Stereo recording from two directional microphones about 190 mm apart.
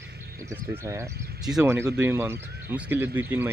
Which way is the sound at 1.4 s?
5° right (ahead or behind).